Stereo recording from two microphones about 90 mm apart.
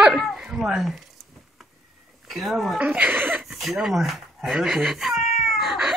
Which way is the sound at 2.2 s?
Centre (ahead or behind).